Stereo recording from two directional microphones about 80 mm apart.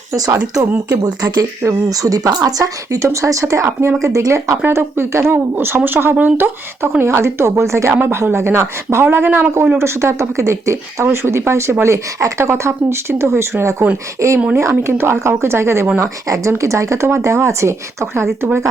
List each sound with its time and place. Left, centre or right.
0.1 s speech: right
1.0 s speech: right
4.6 s speech: right
16.0 s speech: right